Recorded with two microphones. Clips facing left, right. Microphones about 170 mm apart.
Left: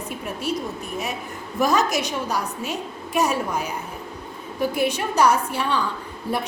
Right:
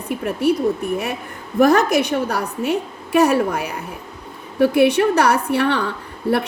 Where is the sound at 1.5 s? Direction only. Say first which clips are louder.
Right 7 dB; 60° right (ahead or behind).